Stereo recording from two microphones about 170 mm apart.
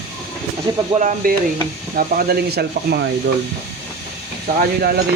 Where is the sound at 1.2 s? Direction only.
60° right (ahead or behind).